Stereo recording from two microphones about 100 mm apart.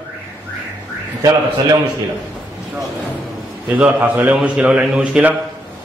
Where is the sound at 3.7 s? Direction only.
15° right (ahead or behind).